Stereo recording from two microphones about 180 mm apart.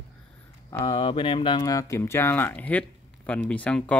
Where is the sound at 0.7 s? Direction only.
25° left (ahead or behind).